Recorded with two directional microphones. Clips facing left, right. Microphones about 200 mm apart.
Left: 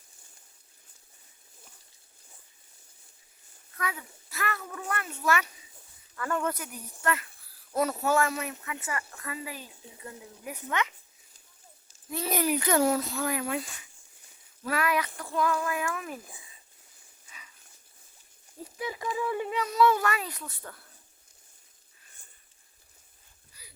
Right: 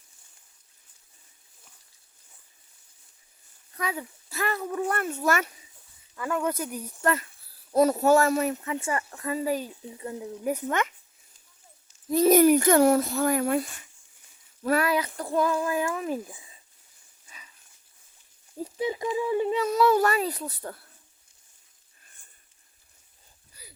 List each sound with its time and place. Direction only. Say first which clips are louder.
3.8 s speech: right 4 dB; 25° right (ahead or behind)
4.9 s speech: right 3 dB; 45° right (ahead or behind)
6.1 s speech: right 2 dB; 10° right (ahead or behind)
6.5 s speech: right 6 dB; 35° right (ahead or behind)
12.1 s speech: right 11 dB; 45° right (ahead or behind)
14.6 s speech: right 4 dB; 35° right (ahead or behind)
18.8 s speech: right 5 dB; 25° right (ahead or behind)
19.6 s speech: right 1 dB; 45° right (ahead or behind)